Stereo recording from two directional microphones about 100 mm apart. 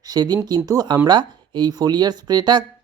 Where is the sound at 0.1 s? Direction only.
45° right (ahead or behind).